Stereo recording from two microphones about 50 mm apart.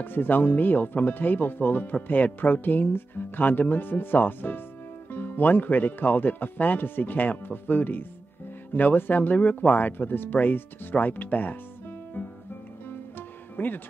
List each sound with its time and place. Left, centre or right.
0.0 s speech: left
13.6 s speech: left